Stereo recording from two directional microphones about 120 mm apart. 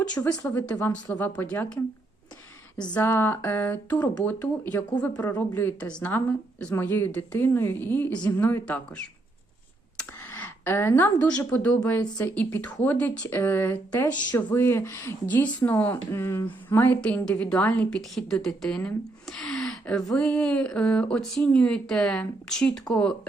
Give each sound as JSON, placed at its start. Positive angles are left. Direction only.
{"t": 0.0, "sound": "speech", "side_deg": 10}
{"t": 2.9, "sound": "speech", "side_deg": 20}
{"t": 10.0, "sound": "a sound", "side_deg": 15}
{"t": 11.4, "sound": "a woman's voice", "side_deg": 15}